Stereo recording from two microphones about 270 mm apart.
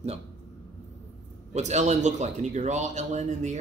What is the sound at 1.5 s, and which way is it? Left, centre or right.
Speech, right.